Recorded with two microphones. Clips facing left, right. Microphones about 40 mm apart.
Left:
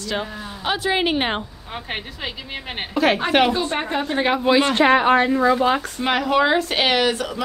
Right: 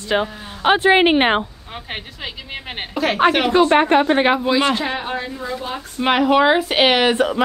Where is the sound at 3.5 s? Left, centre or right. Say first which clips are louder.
Right 9 dB; right.